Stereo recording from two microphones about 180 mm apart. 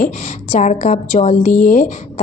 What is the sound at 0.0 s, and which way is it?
A woman's voice, 40° left (ahead or behind).